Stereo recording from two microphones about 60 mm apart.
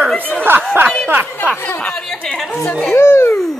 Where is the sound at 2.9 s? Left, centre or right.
Left.